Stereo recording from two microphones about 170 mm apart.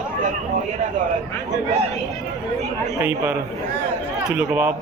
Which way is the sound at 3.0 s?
10° right (ahead or behind).